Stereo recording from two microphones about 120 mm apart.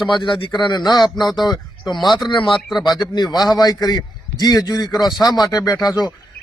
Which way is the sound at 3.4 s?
35° left (ahead or behind).